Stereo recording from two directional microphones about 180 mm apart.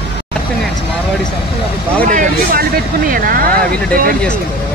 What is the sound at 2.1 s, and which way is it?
Vehicle, 50° right (ahead or behind).